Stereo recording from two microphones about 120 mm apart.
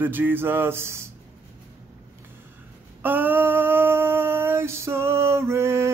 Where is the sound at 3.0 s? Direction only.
15° right (ahead or behind).